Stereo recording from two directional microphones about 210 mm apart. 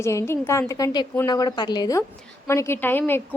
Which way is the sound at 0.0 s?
15° left (ahead or behind).